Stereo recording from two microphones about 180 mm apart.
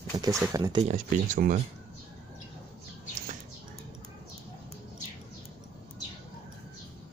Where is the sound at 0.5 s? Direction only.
20° right (ahead or behind).